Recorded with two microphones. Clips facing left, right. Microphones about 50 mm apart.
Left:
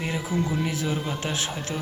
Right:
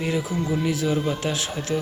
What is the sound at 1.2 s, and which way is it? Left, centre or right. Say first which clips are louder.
Speech: right 2 dB; left.